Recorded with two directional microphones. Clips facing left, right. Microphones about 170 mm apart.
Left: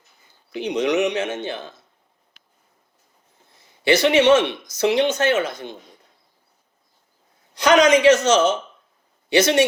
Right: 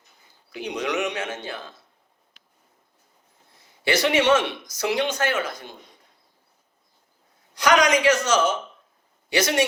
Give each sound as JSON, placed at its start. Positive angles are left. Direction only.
{"t": 0.5, "sound": "speech", "side_deg": 20}
{"t": 3.8, "sound": "speech", "side_deg": 25}
{"t": 7.5, "sound": "speech", "side_deg": 25}